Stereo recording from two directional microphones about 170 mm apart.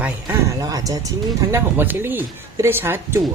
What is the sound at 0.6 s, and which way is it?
Speech, 20° right (ahead or behind).